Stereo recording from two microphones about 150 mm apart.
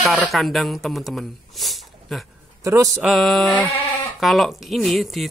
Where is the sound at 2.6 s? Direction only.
20° right (ahead or behind).